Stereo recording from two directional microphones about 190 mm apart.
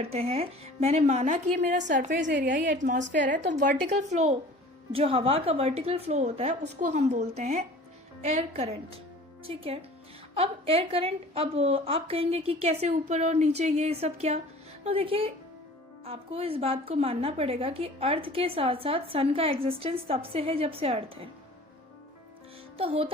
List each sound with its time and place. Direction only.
0.0 s a woman's voice: 30° right (ahead or behind)
22.8 s music: 30° right (ahead or behind)